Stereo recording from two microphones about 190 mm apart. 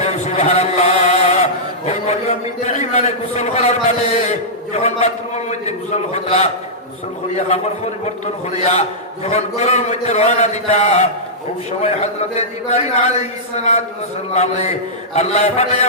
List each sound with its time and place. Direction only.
0.0 s chant: 35° left (ahead or behind)
8.5 s a man's voice: 35° left (ahead or behind)
14.3 s a man's voice: 35° left (ahead or behind)